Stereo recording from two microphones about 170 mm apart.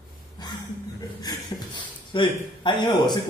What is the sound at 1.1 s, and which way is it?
Speech, 25° left (ahead or behind).